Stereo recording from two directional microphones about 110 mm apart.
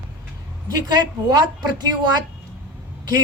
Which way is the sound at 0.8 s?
40° right (ahead or behind).